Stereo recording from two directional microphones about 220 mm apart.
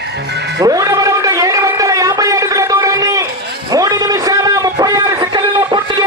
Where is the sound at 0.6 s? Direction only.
15° right (ahead or behind).